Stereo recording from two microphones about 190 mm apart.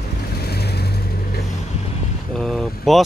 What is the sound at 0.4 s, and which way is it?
Vehicle, 55° left (ahead or behind).